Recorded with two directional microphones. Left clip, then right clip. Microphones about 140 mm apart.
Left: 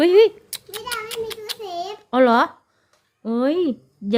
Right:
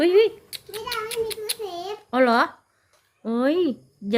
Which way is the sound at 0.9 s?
50° left (ahead or behind).